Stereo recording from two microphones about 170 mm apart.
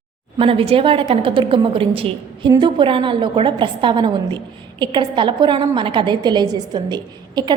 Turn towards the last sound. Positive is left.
turn(degrees=-25)  # may be behind; listen again after turning